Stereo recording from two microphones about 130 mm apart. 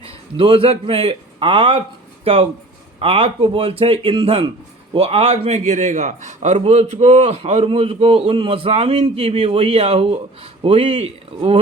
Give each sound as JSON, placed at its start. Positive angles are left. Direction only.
{"t": 0.0, "sound": "a man's voice", "side_deg": -45}